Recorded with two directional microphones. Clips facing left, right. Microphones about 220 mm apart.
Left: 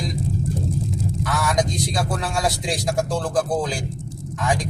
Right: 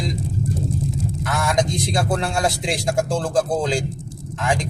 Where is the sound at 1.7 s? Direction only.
25° right (ahead or behind).